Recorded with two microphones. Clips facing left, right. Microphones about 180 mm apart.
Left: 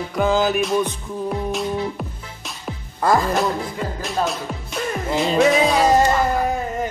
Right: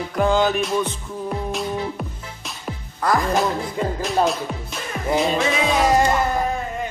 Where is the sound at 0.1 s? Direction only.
Centre (ahead or behind).